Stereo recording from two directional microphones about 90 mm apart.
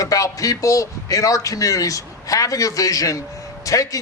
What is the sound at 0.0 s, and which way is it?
A man's voice, 40° left (ahead or behind).